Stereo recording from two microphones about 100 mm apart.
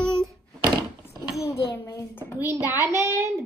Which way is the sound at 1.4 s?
30° left (ahead or behind).